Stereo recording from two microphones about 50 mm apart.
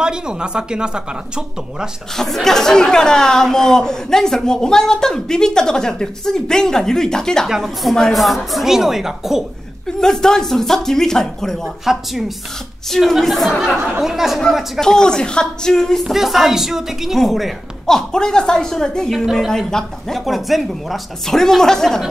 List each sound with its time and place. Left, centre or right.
0.0 s speech: centre
2.1 s speech: centre
7.4 s speech: centre
9.9 s speech: centre
11.8 s speech: centre
14.8 s speech: centre
16.0 s speech: centre
17.8 s speech: centre